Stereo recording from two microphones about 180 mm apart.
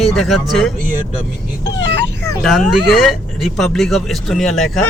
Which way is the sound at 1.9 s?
65° right (ahead or behind).